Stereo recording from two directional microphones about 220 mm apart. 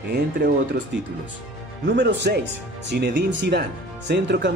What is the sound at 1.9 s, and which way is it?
Speech, 50° right (ahead or behind).